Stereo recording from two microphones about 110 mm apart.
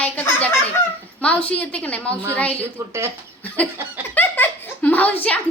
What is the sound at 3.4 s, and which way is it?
A woman's voice, 15° left (ahead or behind).